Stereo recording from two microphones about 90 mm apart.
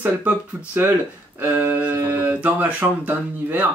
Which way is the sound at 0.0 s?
15° right (ahead or behind).